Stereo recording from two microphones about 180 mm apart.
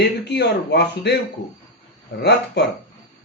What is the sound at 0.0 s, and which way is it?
A man's voice, 65° left (ahead or behind).